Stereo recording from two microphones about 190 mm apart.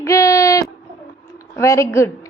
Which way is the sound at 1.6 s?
15° left (ahead or behind).